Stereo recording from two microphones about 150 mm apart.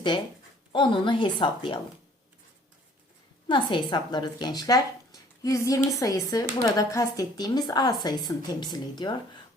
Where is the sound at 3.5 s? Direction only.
30° left (ahead or behind).